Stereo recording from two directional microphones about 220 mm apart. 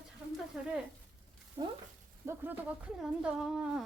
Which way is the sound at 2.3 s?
10° right (ahead or behind).